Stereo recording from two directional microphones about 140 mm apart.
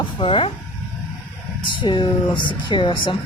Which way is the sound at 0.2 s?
40° left (ahead or behind).